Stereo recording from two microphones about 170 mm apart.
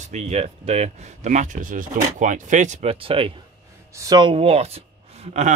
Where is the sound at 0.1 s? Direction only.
40° right (ahead or behind).